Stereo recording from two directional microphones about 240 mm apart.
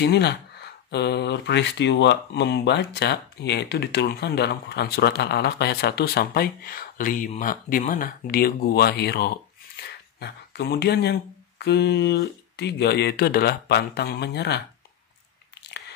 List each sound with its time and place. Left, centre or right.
0.0 s speech: left